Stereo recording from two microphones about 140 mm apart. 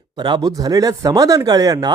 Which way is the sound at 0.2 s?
30° right (ahead or behind).